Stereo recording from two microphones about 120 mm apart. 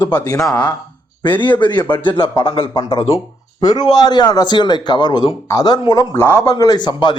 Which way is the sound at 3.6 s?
35° left (ahead or behind).